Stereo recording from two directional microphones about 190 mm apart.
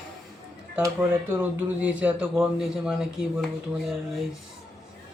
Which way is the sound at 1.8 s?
5° right (ahead or behind).